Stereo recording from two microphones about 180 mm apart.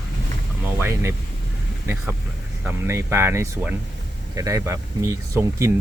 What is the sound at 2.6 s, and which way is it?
Speech, 15° right (ahead or behind).